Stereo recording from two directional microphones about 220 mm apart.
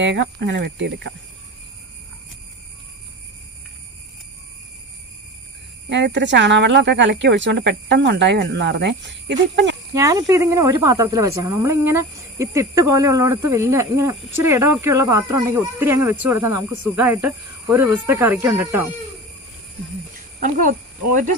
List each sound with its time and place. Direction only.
0.0 s speech: 55° right (ahead or behind)
5.9 s speech: 55° right (ahead or behind)
9.9 s speech: 15° right (ahead or behind)
20.4 s speech: 35° right (ahead or behind)